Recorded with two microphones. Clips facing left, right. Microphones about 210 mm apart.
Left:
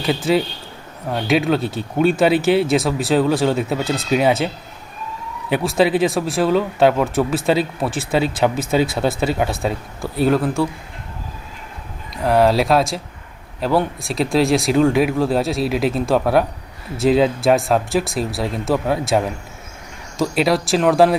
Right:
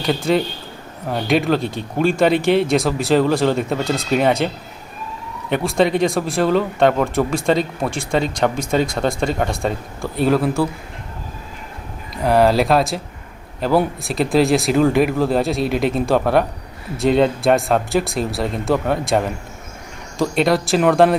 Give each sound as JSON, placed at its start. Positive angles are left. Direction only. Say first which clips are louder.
{"t": 0.0, "sound": "speech", "louder": "even", "side_deg": 5}
{"t": 12.1, "sound": "speech", "louder": "even", "side_deg": 0}